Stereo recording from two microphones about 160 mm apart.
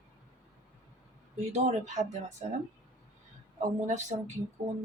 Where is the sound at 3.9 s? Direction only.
50° right (ahead or behind).